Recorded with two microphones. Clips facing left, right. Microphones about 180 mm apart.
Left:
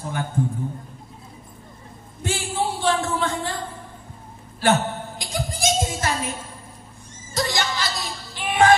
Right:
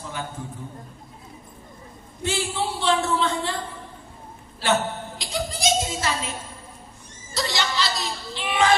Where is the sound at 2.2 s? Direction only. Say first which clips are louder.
Left 1 dB; 50° left (ahead or behind).